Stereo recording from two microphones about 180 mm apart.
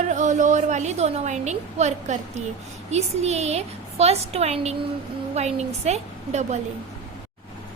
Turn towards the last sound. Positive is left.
turn(degrees=-40)  # may be behind; listen again after turning